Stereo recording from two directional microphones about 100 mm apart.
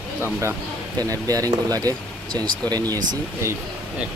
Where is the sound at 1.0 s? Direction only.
35° right (ahead or behind).